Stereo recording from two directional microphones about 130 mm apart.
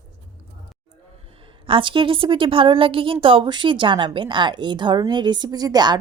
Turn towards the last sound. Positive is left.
turn(degrees=-30)  # may be behind; listen again after turning